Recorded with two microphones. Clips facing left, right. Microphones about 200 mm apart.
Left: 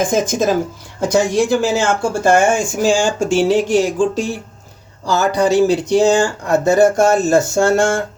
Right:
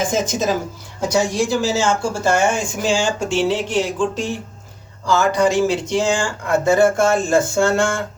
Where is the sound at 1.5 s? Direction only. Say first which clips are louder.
Left 3 dB; 55° left (ahead or behind).